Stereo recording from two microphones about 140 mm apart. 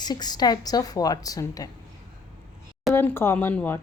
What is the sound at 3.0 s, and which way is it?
Speech, 15° left (ahead or behind).